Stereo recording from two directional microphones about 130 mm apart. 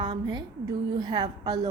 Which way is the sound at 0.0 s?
35° right (ahead or behind).